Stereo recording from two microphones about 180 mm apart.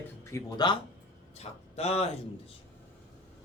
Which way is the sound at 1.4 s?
35° left (ahead or behind).